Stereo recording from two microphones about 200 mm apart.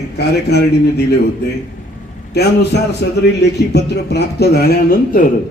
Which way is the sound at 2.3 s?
55° left (ahead or behind).